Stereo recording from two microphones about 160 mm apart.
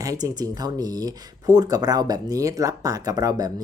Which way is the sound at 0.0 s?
20° right (ahead or behind).